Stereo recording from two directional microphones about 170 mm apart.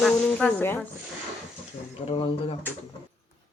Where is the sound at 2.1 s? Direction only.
35° left (ahead or behind).